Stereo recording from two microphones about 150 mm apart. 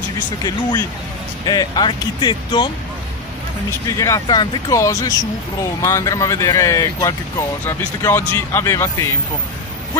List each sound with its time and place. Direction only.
0.4 s speech: 25° left (ahead or behind)
4.0 s speech: 25° left (ahead or behind)